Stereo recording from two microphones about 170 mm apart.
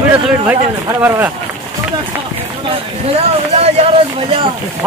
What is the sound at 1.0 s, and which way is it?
Speech, 10° right (ahead or behind).